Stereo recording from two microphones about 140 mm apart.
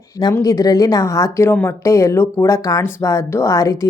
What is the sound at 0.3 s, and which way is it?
A woman's voice, 25° left (ahead or behind).